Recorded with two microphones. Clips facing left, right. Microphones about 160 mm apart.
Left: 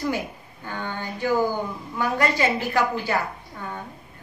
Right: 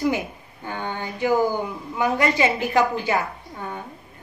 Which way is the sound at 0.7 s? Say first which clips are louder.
Right 2 dB; 20° right (ahead or behind).